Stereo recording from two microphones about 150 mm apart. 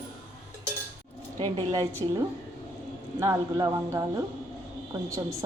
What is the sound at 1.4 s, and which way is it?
Speech, 25° right (ahead or behind).